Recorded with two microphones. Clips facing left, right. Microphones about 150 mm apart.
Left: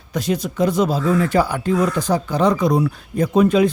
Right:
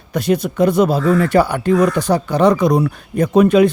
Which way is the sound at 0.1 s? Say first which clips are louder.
Right 5 dB; 60° right (ahead or behind).